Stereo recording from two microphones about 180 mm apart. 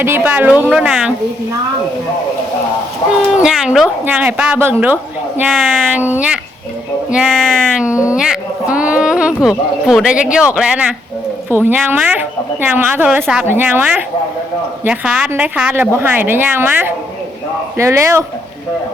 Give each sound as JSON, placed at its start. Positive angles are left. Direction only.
{"t": 0.0, "sound": "a woman's voice", "side_deg": -10}
{"t": 3.3, "sound": "a woman's voice", "side_deg": -5}